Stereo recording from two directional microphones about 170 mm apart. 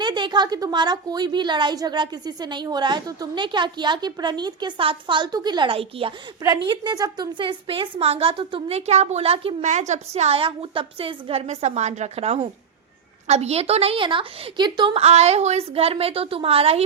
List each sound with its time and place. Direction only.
0.0 s a woman's voice: 25° right (ahead or behind)